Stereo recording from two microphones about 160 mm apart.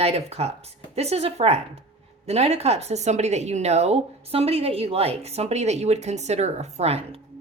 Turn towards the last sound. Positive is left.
turn(degrees=-40)  # may be behind; listen again after turning